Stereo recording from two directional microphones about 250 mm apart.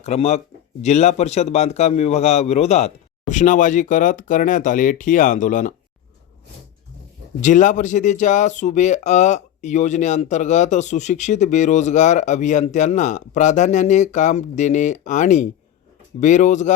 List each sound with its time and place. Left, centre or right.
0.0 s speech: left
7.4 s speech: left